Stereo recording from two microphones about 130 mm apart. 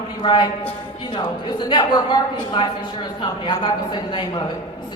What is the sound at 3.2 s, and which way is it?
A woman's voice, 35° left (ahead or behind).